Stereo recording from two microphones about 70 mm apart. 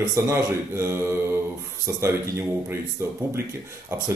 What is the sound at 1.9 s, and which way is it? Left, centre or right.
Speech, right.